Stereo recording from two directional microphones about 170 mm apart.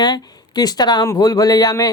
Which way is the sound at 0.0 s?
25° left (ahead or behind).